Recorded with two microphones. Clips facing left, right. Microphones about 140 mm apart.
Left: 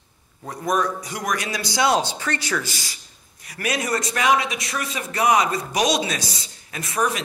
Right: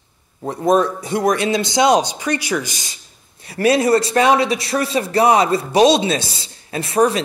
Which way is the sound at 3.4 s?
30° right (ahead or behind).